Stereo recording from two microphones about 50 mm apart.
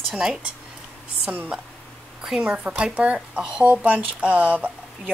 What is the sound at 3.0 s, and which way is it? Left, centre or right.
Speech, right.